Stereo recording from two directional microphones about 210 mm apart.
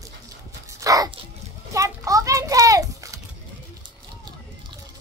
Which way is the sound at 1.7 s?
15° right (ahead or behind).